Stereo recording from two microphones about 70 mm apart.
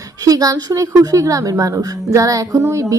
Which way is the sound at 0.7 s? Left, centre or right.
Right.